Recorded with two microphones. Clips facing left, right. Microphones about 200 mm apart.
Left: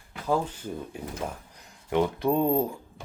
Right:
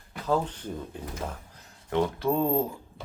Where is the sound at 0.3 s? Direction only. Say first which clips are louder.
Even; 10° left (ahead or behind).